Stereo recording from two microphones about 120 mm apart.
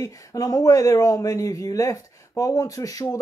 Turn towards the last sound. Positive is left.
turn(degrees=30)  # may be behind; listen again after turning